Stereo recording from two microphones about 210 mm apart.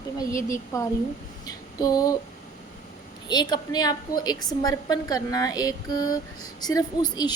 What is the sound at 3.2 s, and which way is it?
A woman's voice, 20° left (ahead or behind).